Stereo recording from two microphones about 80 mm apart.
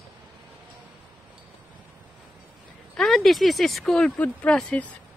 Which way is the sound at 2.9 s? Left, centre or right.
Centre.